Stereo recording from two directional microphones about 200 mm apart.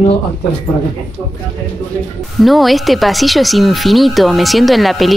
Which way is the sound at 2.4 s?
Centre (ahead or behind).